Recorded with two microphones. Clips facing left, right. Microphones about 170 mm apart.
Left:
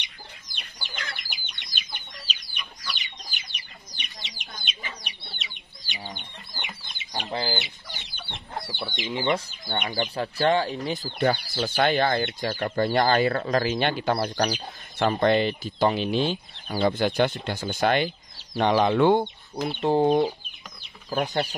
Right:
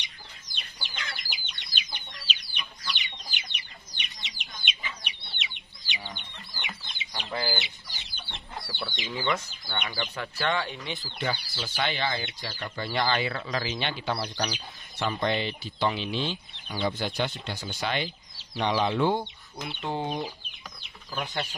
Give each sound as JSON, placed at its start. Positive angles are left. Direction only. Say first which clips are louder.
{"t": 0.6, "sound": "chicken", "louder": "left 2 dB", "side_deg": 55}
{"t": 8.6, "sound": "chicken", "louder": "left 2 dB", "side_deg": 20}
{"t": 9.1, "sound": "speech", "louder": "left 5 dB", "side_deg": 25}
{"t": 19.6, "sound": "speech", "louder": "left 10 dB", "side_deg": 40}